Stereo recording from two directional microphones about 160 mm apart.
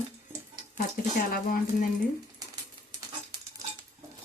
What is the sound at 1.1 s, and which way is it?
Speech, 60° left (ahead or behind).